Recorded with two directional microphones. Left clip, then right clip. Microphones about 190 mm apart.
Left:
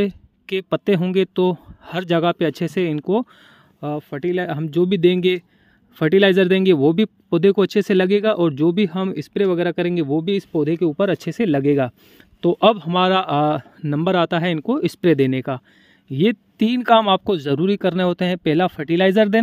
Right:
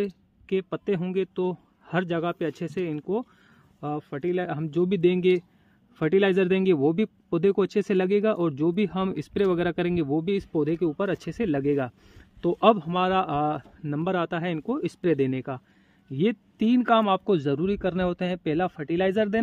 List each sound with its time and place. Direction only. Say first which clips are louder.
0.0 s speech: left 8 dB; 45° left (ahead or behind)